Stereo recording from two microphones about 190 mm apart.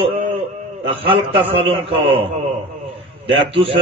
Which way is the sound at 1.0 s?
30° right (ahead or behind).